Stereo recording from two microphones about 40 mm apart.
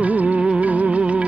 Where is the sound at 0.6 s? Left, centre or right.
Right.